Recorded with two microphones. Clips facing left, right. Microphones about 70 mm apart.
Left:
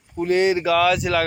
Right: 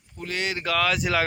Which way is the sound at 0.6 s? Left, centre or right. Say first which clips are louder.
Left 6 dB; centre.